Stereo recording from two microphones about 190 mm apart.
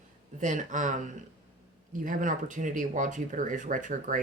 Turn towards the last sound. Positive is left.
turn(degrees=-45)  # may be behind; listen again after turning